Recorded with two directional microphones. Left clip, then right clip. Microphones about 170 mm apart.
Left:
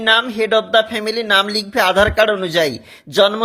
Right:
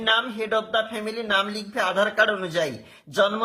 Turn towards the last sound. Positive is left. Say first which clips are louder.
# left 8 dB
turn(degrees=35)  # may be behind; listen again after turning